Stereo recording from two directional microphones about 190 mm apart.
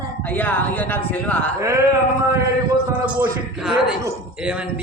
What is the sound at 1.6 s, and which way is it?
Speech, 15° right (ahead or behind).